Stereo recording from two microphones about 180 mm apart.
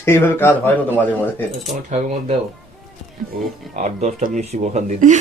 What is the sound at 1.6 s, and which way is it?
Speech, 35° right (ahead or behind).